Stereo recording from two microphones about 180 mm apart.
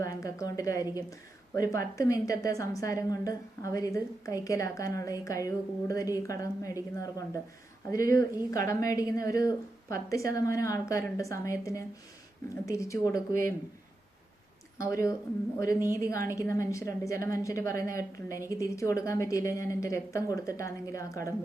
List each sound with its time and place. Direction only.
0.0 s a woman's voice: 15° left (ahead or behind)
14.8 s a woman's voice: 15° left (ahead or behind)